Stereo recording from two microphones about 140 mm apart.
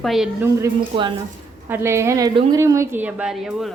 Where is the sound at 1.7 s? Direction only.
20° right (ahead or behind).